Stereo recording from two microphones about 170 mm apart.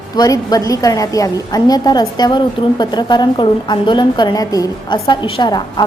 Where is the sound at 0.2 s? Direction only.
20° left (ahead or behind).